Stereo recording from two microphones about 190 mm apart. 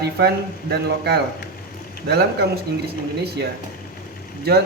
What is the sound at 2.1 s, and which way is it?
Speech, 55° right (ahead or behind).